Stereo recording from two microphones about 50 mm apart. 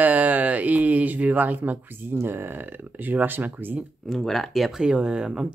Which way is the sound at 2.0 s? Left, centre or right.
Right.